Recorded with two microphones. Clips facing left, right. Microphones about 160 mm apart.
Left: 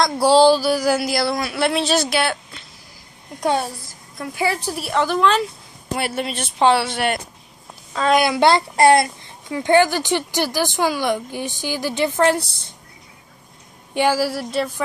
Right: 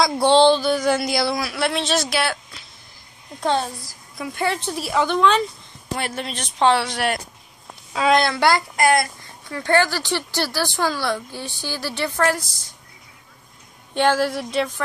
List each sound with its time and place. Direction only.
0.0 s speech: centre (ahead or behind)
3.3 s a woman's voice: 10° left (ahead or behind)
8.4 s speech: 25° left (ahead or behind)
9.5 s speech: 15° left (ahead or behind)
12.4 s a woman's voice: 60° left (ahead or behind)
13.9 s speech: 10° left (ahead or behind)